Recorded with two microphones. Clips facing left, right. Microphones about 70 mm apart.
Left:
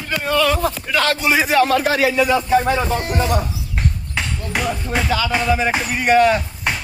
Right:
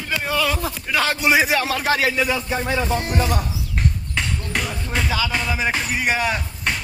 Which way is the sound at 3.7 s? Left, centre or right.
Centre.